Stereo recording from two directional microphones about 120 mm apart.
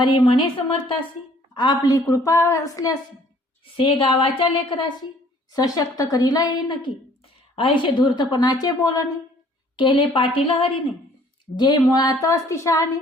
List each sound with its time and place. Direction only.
0.3 s a woman's voice: 45° left (ahead or behind)
3.8 s a woman's voice: 50° left (ahead or behind); by 9.1 s 30° left (ahead or behind)
9.7 s a woman's voice: 40° left (ahead or behind)
11.5 s a woman's voice: 35° left (ahead or behind)